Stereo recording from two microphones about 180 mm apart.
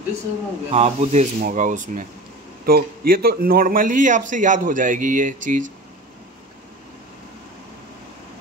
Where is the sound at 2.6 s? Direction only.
55° right (ahead or behind).